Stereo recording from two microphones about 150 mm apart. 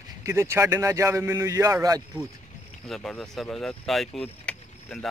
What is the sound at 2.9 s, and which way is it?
Speech, 5° left (ahead or behind).